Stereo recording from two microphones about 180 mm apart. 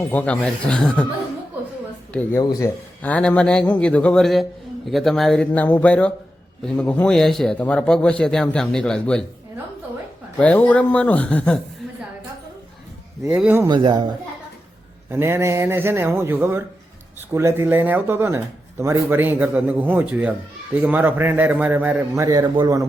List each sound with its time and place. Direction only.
0.1 s a man's voice: 5° left (ahead or behind)
2.4 s speech: 20° left (ahead or behind)
3.0 s a man's voice: 5° left (ahead or behind)
10.3 s a man's voice: 5° left (ahead or behind)
13.3 s speech: 10° right (ahead or behind)
13.7 s speech: 25° right (ahead or behind)
15.1 s speech: 15° right (ahead or behind)